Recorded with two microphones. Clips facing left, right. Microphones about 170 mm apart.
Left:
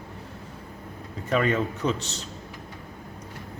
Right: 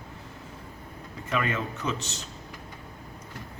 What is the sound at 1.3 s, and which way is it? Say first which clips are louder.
Speech: left 5 dB; 35° left (ahead or behind).